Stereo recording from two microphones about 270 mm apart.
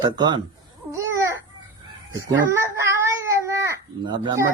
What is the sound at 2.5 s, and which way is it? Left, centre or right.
Speech, centre.